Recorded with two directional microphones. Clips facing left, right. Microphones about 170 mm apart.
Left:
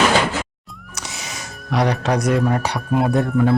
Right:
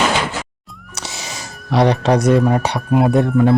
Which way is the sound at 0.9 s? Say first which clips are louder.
Right 3 dB; 30° right (ahead or behind).